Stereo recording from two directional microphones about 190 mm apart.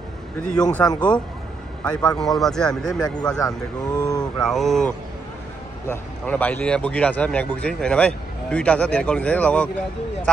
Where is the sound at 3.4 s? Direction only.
20° left (ahead or behind).